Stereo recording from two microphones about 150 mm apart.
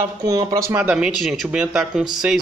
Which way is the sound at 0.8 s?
5° right (ahead or behind).